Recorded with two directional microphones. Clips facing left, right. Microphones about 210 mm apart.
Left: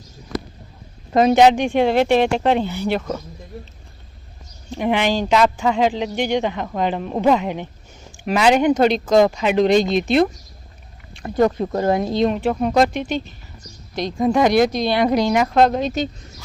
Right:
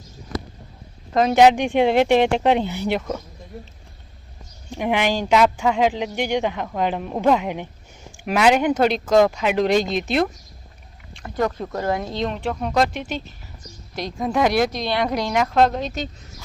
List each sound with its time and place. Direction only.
1.3 s speech: 5° right (ahead or behind)
4.7 s speech: 10° right (ahead or behind)
11.2 s speech: 30° left (ahead or behind)
12.0 s speech: 10° left (ahead or behind)